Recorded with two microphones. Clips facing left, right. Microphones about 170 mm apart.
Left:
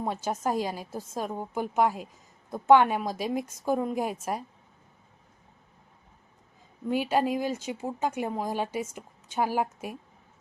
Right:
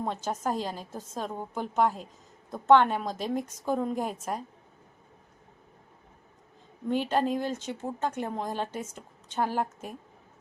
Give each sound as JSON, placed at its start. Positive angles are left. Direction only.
{"t": 0.0, "sound": "speech", "side_deg": 10}
{"t": 6.8, "sound": "speech", "side_deg": 10}